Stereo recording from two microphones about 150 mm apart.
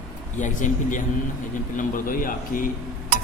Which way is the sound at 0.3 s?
55° left (ahead or behind).